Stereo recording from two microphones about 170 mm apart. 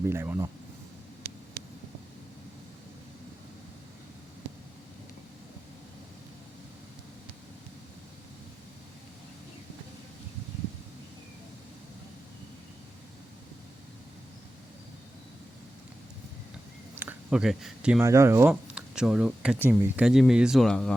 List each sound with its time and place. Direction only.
0.1 s speech: 15° right (ahead or behind)
1.2 s a sound: 60° right (ahead or behind)
17.0 s speech: 10° right (ahead or behind)
18.0 s speech: 15° right (ahead or behind); by 20.9 s 5° left (ahead or behind)